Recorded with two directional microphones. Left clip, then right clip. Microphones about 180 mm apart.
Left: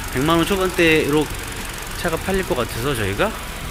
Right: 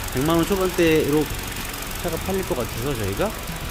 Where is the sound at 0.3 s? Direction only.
10° right (ahead or behind).